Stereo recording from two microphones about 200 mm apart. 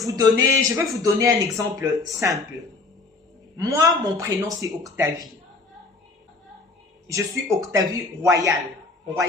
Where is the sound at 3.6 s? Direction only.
15° right (ahead or behind).